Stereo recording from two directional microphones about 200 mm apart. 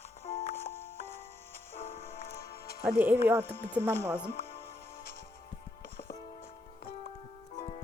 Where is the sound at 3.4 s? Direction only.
10° left (ahead or behind).